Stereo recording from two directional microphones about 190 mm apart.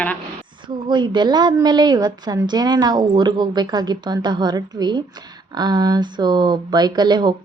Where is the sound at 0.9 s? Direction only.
25° right (ahead or behind).